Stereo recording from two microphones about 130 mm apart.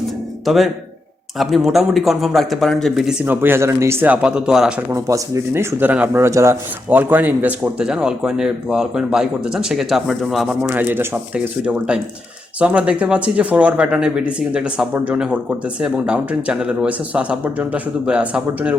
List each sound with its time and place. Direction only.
0.4 s speech: centre (ahead or behind)
3.2 s speech: 15° right (ahead or behind)
4.0 s speech: 10° right (ahead or behind)
4.9 s speech: 25° right (ahead or behind); by 10.5 s centre (ahead or behind)
10.6 s speech: 15° right (ahead or behind)